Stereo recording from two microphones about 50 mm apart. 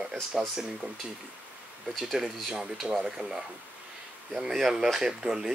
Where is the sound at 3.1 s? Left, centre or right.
Centre.